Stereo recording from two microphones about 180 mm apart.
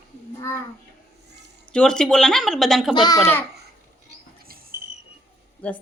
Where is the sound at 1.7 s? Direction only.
5° left (ahead or behind).